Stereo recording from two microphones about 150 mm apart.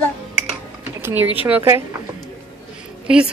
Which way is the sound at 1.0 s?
15° right (ahead or behind).